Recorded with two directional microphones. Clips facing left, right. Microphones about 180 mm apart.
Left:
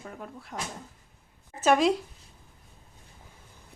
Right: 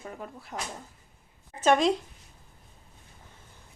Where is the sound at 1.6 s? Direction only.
5° left (ahead or behind).